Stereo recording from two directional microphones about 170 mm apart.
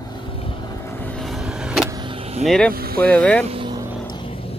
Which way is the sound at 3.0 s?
5° left (ahead or behind).